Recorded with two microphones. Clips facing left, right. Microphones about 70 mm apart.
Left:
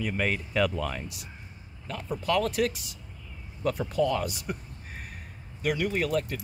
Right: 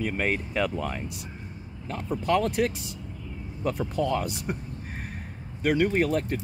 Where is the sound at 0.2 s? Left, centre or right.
Centre.